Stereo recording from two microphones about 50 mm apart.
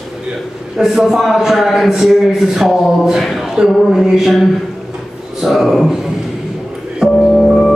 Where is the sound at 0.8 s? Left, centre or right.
Centre.